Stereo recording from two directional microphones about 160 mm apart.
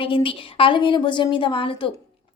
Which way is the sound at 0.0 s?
35° left (ahead or behind).